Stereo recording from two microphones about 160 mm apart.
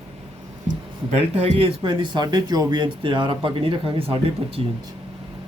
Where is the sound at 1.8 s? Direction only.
30° right (ahead or behind).